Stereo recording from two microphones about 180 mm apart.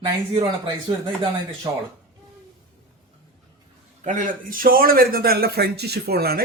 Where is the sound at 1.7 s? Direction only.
20° right (ahead or behind).